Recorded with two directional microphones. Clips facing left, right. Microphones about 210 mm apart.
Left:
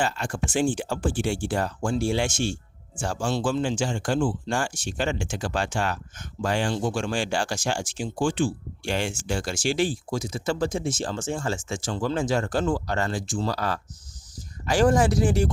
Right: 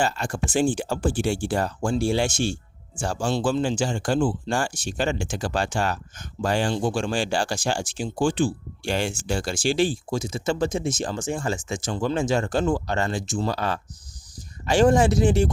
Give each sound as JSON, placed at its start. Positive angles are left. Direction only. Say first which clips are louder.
{"t": 0.0, "sound": "speech", "louder": "right 2 dB", "side_deg": -40}